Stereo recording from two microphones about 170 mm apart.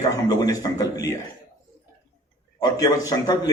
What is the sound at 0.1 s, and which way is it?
A man's voice, 20° left (ahead or behind).